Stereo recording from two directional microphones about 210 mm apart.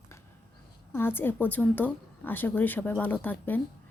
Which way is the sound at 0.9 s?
10° left (ahead or behind).